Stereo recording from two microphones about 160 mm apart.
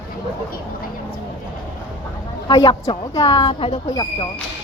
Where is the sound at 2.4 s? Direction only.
25° left (ahead or behind).